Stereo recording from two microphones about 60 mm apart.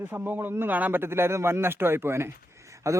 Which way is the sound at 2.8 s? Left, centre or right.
Right.